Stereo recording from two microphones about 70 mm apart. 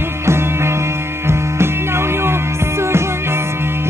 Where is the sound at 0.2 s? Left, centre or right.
Right.